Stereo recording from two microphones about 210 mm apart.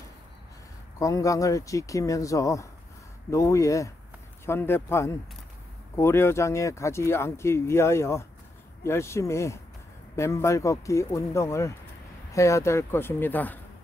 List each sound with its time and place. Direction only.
0.9 s speech: 15° left (ahead or behind)